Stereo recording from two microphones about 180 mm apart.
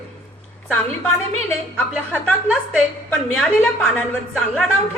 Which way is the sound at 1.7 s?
5° left (ahead or behind).